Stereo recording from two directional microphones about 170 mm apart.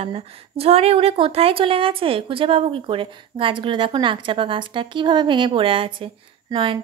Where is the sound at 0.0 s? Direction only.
35° right (ahead or behind).